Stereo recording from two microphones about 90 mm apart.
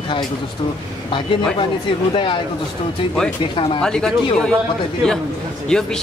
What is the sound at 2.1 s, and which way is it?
Speech, 65° left (ahead or behind).